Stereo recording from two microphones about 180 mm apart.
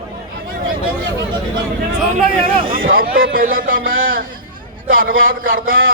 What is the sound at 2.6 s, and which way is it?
A man's voice, 50° right (ahead or behind).